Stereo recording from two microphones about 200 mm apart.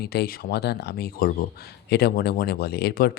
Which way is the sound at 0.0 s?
55° left (ahead or behind).